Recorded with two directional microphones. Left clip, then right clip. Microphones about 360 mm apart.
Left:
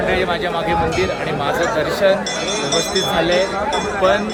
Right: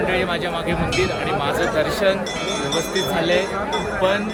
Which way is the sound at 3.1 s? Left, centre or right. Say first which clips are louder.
Left 3 dB; centre.